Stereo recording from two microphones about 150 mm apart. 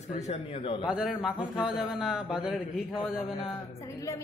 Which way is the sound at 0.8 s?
5° right (ahead or behind).